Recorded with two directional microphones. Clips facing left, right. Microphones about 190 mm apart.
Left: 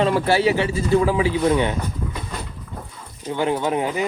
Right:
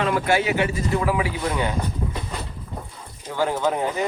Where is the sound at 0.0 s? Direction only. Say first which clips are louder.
Left 3 dB; 35° left (ahead or behind).